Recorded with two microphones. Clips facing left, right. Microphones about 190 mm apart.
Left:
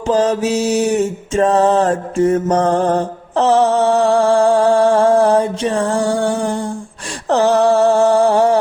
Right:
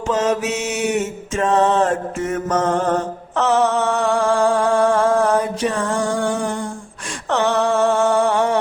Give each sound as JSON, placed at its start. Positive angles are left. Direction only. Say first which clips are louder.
{"t": 0.1, "sound": "mantra", "louder": "left 5 dB", "side_deg": 35}